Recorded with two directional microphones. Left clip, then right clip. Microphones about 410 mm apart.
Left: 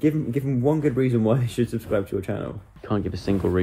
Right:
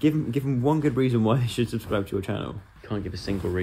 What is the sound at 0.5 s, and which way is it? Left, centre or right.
Speech, centre.